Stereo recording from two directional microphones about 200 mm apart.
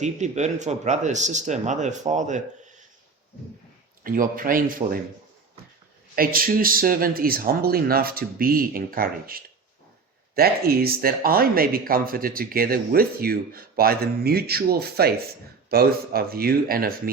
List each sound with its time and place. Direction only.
0.0 s speech: 35° right (ahead or behind)
4.0 s speech: 45° right (ahead or behind)
6.1 s speech: 45° right (ahead or behind)